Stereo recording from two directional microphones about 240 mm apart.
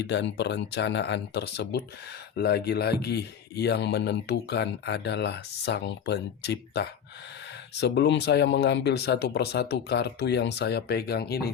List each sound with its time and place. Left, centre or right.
0.0 s speech: left